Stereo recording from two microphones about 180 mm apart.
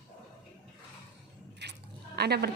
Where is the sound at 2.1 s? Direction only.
65° right (ahead or behind).